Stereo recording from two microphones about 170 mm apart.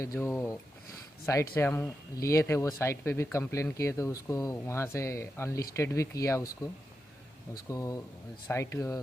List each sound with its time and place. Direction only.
0.0 s speech: 15° left (ahead or behind)
7.7 s speech: 20° left (ahead or behind)